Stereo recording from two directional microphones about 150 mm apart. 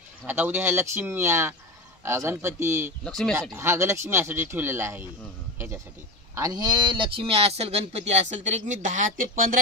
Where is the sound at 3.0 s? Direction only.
Centre (ahead or behind).